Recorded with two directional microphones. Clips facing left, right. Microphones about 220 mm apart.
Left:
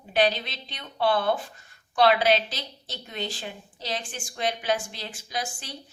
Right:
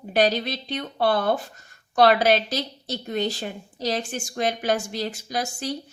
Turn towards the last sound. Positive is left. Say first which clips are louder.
# right 6 dB
turn(degrees=-45)  # may be behind; listen again after turning